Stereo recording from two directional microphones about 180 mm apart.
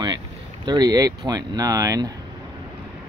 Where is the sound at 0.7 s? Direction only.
25° right (ahead or behind).